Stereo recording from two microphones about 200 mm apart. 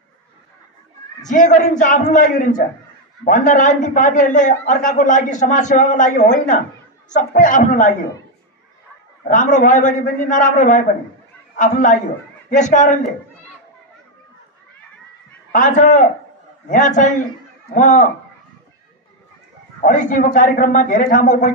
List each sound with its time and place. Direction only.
1.3 s a man's voice: 40° left (ahead or behind)
9.3 s a man's voice: 40° left (ahead or behind)
15.5 s a man's voice: 40° left (ahead or behind)
19.8 s a man's voice: 40° left (ahead or behind)